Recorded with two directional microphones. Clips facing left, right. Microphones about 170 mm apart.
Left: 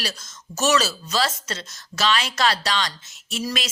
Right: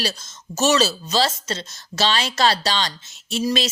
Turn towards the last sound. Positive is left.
turn(degrees=-25)  # may be behind; listen again after turning